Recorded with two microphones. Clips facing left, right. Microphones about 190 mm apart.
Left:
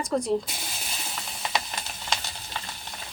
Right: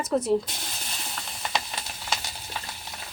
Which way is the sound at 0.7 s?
Centre (ahead or behind).